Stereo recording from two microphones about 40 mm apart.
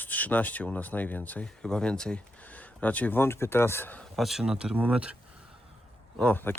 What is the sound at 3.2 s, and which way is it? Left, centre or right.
Speech, left.